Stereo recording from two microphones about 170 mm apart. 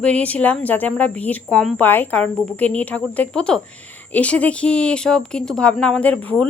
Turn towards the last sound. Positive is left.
turn(degrees=10)  # may be behind; listen again after turning